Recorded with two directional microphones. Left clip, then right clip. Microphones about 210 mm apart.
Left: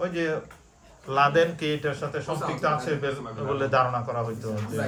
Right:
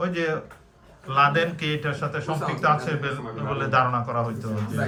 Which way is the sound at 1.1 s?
15° left (ahead or behind).